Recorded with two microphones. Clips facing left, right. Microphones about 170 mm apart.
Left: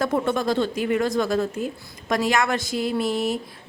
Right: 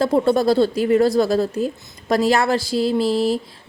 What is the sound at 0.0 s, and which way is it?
A woman's voice, 30° right (ahead or behind).